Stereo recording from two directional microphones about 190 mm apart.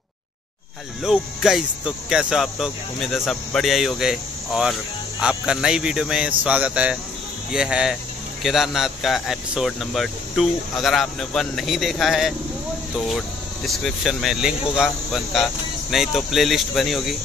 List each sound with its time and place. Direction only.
1.0 s speech: centre (ahead or behind)
13.7 s speech: centre (ahead or behind)